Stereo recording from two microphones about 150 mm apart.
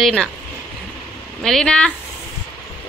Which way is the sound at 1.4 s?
5° left (ahead or behind).